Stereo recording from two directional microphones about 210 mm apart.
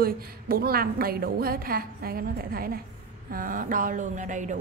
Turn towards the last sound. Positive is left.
turn(degrees=-35)  # may be behind; listen again after turning